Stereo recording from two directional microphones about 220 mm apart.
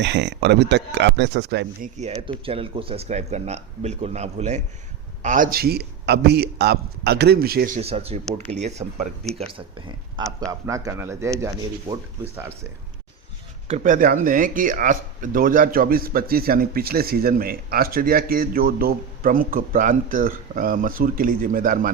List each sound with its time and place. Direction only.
0.0 s a man's voice: 50° right (ahead or behind)
2.0 s a man's voice: 25° right (ahead or behind); by 7.8 s 45° right (ahead or behind)
7.8 s speech: 25° right (ahead or behind)
9.8 s a man's voice: 20° right (ahead or behind)
13.7 s speech: 35° right (ahead or behind)